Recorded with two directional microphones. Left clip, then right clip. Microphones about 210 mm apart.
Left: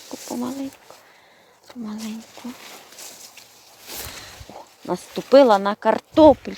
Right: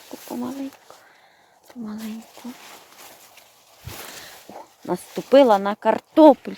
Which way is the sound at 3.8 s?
10° right (ahead or behind).